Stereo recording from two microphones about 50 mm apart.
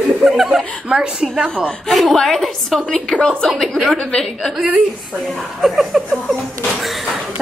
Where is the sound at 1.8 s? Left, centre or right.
Centre.